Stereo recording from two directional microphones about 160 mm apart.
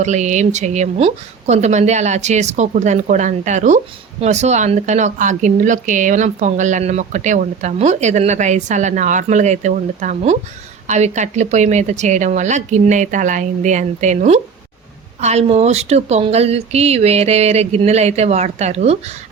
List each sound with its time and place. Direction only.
0.0 s speech: 50° right (ahead or behind)